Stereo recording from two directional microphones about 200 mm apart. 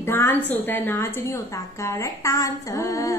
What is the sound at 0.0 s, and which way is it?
A woman's voice, 10° left (ahead or behind).